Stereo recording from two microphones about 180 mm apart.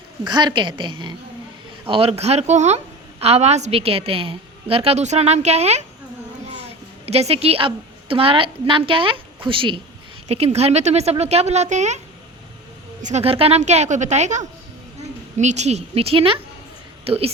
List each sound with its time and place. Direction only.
0.3 s a woman's voice: 25° right (ahead or behind); by 11.9 s 40° right (ahead or behind)
13.0 s a woman's voice: 40° right (ahead or behind)